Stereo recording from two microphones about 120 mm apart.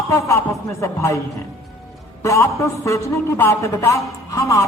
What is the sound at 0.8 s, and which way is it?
Speech, 25° left (ahead or behind).